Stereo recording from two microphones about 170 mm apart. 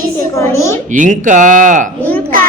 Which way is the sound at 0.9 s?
50° right (ahead or behind).